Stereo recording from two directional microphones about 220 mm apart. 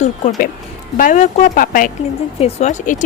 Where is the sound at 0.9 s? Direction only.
35° left (ahead or behind).